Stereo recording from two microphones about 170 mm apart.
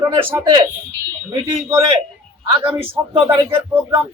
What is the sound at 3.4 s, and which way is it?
Speech, 15° right (ahead or behind).